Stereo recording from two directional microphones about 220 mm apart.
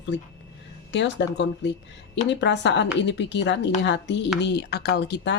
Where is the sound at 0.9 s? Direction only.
55° left (ahead or behind).